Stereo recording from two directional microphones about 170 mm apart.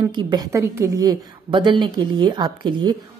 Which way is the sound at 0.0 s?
25° right (ahead or behind).